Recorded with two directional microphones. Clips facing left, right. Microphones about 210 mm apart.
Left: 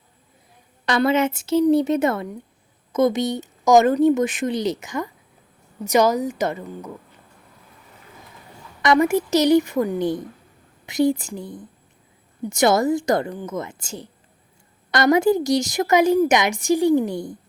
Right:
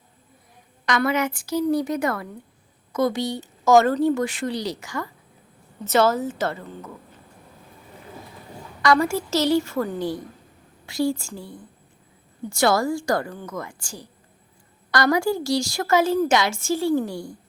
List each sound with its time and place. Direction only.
0.9 s a woman's voice: 30° left (ahead or behind)
8.8 s a woman's voice: 20° left (ahead or behind)